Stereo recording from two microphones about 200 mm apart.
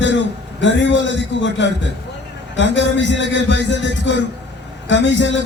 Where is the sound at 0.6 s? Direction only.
65° left (ahead or behind).